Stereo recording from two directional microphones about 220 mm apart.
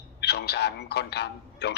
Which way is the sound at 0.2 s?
50° left (ahead or behind).